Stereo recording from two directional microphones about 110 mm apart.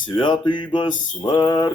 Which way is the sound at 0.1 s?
45° left (ahead or behind).